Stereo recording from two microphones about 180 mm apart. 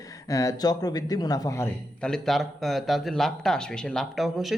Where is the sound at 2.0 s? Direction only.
Centre (ahead or behind).